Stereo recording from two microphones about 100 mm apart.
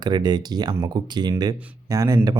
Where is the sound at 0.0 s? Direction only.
45° right (ahead or behind).